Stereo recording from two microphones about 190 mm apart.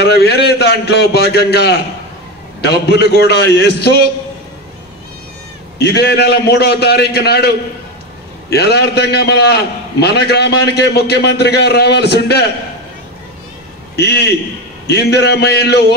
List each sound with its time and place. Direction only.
0.0 s a sound: 60° left (ahead or behind)
2.6 s a man's voice: 60° left (ahead or behind)
5.8 s a man's voice: 60° left (ahead or behind)
13.9 s a man's voice: 60° left (ahead or behind)